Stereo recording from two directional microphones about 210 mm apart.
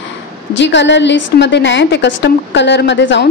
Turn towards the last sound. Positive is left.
turn(degrees=60)  # may be behind; listen again after turning